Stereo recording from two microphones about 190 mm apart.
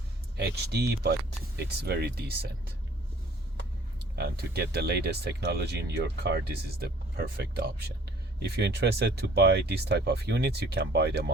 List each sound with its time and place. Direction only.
0.3 s speech: 60° right (ahead or behind)
4.1 s speech: 55° right (ahead or behind)